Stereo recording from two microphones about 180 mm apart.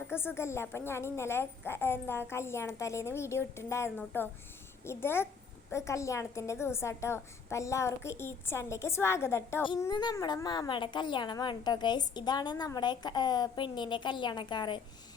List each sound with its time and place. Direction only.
0.1 s a woman's voice: 15° left (ahead or behind)